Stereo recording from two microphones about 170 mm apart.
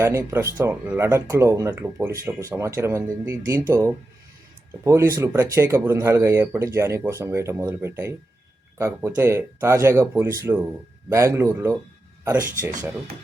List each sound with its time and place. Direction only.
0.0 s speech: 15° right (ahead or behind)